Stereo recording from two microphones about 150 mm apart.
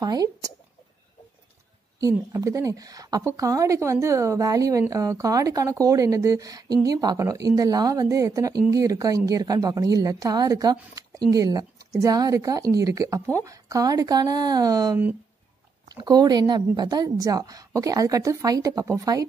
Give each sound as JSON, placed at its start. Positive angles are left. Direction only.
{"t": 0.0, "sound": "a woman's voice", "side_deg": -25}
{"t": 2.0, "sound": "a woman's voice", "side_deg": -20}